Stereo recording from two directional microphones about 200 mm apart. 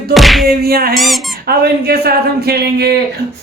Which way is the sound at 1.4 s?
50° right (ahead or behind).